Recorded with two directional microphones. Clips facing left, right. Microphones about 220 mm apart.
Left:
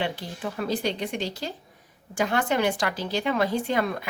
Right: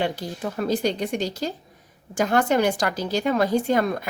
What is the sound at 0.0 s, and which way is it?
Speech, 40° right (ahead or behind).